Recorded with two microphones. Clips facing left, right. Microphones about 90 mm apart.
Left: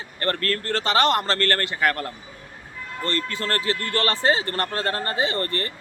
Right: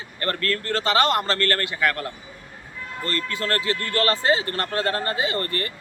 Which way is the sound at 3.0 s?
30° left (ahead or behind).